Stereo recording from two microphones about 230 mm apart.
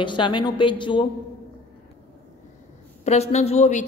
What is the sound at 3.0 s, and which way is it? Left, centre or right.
Speech, left.